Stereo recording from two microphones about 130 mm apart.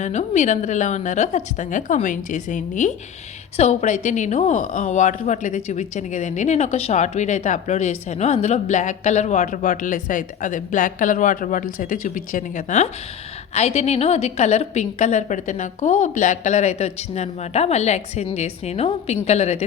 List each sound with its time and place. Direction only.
0.0 s a woman's voice: 65° left (ahead or behind)
3.6 s a woman's voice: 60° left (ahead or behind)
13.5 s a woman's voice: 55° left (ahead or behind)